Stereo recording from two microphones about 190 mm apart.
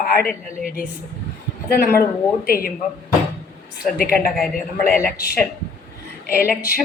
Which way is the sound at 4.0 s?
50° left (ahead or behind).